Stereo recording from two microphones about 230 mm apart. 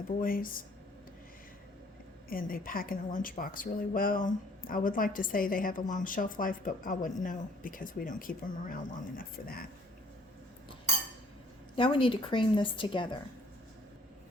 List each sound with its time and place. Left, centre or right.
0.2 s speech: left
2.3 s speech: left
11.8 s speech: left